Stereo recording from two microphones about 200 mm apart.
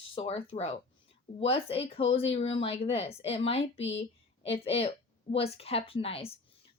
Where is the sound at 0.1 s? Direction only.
30° left (ahead or behind).